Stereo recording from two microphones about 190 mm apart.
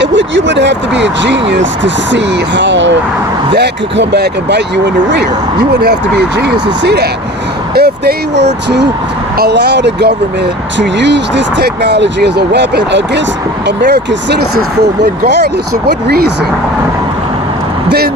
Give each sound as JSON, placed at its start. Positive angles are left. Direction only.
{"t": 0.0, "sound": "speech", "side_deg": -70}
{"t": 17.8, "sound": "speech", "side_deg": -55}